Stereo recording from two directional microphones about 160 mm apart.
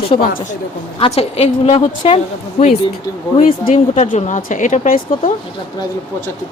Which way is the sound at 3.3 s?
35° left (ahead or behind).